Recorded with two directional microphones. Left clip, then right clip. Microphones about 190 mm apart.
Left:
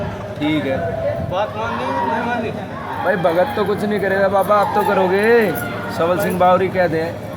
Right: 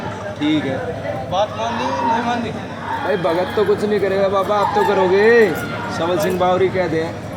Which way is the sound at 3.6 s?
25° left (ahead or behind).